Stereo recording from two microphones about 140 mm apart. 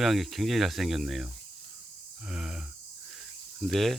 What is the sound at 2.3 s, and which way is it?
Speech, 5° right (ahead or behind).